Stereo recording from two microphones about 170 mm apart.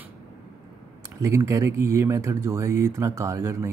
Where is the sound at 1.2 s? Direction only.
20° right (ahead or behind).